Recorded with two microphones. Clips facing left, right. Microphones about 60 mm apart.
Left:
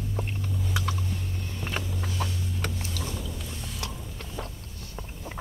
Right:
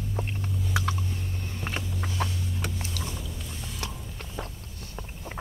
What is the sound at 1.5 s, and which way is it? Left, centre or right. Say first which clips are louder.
Vehicle: right 1 dB; right.